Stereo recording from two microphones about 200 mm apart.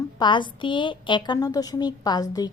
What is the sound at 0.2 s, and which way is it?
A woman's voice, 25° left (ahead or behind).